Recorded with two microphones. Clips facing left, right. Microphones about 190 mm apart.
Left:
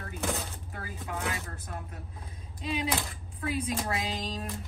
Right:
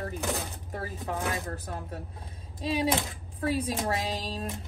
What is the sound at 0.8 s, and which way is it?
Speech, 35° right (ahead or behind).